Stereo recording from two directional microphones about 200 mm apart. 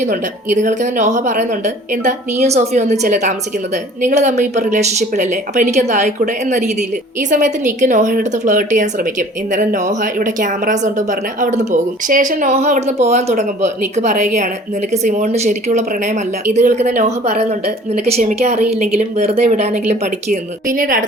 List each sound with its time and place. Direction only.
0.0 s a woman's voice: 40° right (ahead or behind)